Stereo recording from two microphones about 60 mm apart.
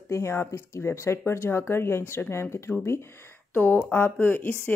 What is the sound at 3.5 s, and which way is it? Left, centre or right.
A woman's voice, left.